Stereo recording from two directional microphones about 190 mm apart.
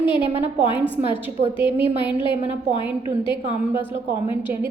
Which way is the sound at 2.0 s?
25° left (ahead or behind).